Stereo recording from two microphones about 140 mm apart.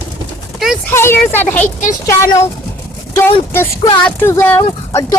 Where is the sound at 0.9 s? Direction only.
15° left (ahead or behind).